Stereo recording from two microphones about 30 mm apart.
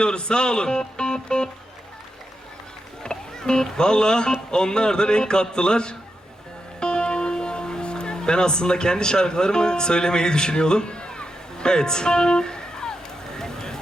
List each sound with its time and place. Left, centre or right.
0.0 s speech: left
3.0 s speech: left
6.7 s music: left